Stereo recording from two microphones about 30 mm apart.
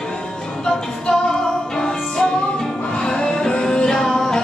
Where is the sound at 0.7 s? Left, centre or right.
Left.